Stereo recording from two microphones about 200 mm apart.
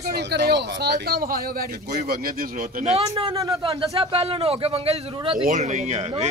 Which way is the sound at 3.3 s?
15° right (ahead or behind).